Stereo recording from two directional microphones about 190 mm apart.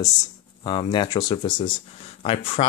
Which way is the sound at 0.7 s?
25° left (ahead or behind).